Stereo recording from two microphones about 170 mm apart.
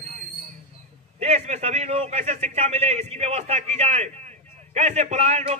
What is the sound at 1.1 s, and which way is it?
A man's voice, 40° right (ahead or behind).